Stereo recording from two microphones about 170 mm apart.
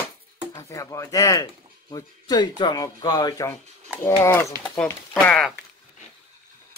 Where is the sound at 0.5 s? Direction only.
20° left (ahead or behind).